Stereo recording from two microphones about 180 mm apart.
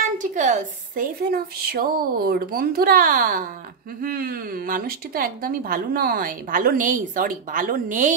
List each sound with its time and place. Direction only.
0.2 s a woman's voice: 45° right (ahead or behind)